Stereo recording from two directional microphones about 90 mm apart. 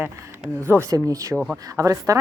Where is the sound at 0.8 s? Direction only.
40° right (ahead or behind).